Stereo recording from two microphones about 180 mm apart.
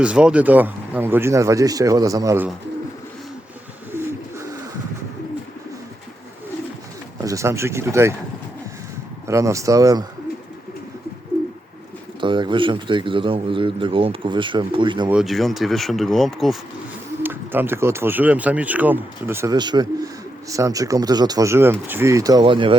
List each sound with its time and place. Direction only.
0.0 s speech: 5° right (ahead or behind)
7.2 s speech: 15° right (ahead or behind)
9.2 s speech: 15° right (ahead or behind)
12.2 s speech: 25° right (ahead or behind)
15.1 s speech: centre (ahead or behind)
17.2 s speech: 10° right (ahead or behind); by 22.8 s 30° right (ahead or behind)